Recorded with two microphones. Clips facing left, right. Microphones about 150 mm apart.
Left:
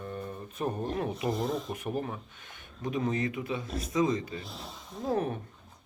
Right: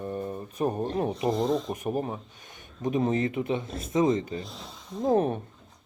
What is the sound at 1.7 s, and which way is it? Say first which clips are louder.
Speech: right 4 dB; 40° right (ahead or behind).